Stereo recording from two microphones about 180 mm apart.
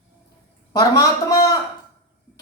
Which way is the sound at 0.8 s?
20° left (ahead or behind).